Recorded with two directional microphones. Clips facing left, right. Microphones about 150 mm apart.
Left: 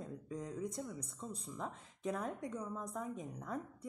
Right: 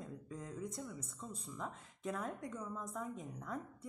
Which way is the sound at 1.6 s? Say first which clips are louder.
Left 1 dB; 30° left (ahead or behind).